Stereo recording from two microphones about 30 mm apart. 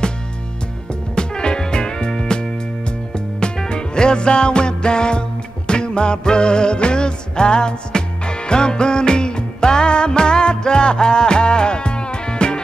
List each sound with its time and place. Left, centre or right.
1.1 s music: left